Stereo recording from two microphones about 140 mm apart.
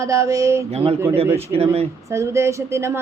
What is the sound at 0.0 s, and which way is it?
Speech, 25° right (ahead or behind).